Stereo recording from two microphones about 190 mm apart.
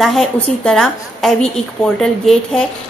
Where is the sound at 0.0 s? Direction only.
Centre (ahead or behind).